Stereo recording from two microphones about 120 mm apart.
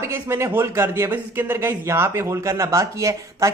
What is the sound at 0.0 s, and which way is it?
Speech, 20° right (ahead or behind).